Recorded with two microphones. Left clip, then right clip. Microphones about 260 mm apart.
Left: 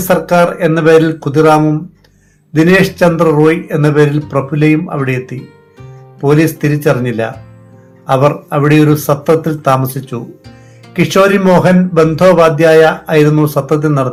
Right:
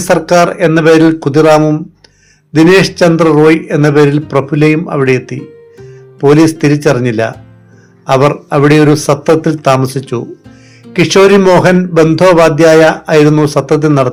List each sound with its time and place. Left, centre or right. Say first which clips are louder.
0.1 s a man's voice: right 2 dB; right